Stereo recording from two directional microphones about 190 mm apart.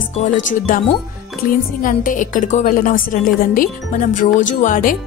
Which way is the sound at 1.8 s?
45° left (ahead or behind).